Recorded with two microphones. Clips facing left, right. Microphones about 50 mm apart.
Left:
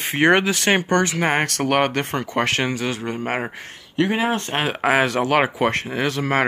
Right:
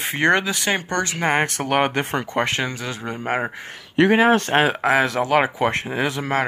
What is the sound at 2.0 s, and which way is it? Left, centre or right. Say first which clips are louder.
Speech: right 1 dB; right.